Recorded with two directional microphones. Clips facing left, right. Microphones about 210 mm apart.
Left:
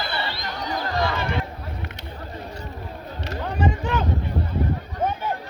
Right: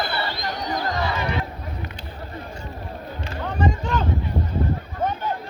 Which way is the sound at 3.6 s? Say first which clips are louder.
Right 1 dB; 5° left (ahead or behind).